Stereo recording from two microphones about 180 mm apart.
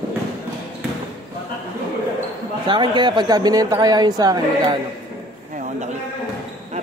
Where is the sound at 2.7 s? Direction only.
25° right (ahead or behind).